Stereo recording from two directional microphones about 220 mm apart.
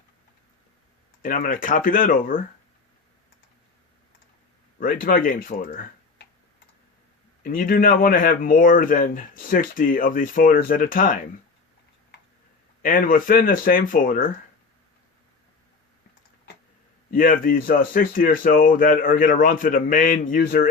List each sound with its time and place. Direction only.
1.2 s a man's voice: 35° left (ahead or behind)
4.8 s a man's voice: 40° left (ahead or behind)
7.4 s a man's voice: 40° left (ahead or behind)
12.8 s a man's voice: 40° left (ahead or behind)
17.1 s a man's voice: 40° left (ahead or behind)